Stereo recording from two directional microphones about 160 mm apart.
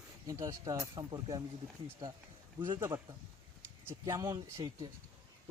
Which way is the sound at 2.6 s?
20° right (ahead or behind).